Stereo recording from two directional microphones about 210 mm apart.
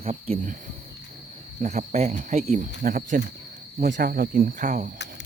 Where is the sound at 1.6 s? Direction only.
35° right (ahead or behind).